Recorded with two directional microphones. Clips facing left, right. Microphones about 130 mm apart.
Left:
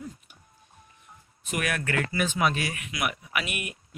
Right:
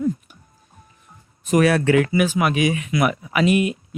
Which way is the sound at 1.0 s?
40° right (ahead or behind).